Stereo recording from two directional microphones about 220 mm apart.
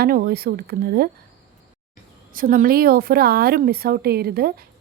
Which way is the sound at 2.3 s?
40° right (ahead or behind).